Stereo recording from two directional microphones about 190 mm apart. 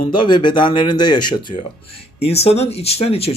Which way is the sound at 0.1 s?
25° left (ahead or behind).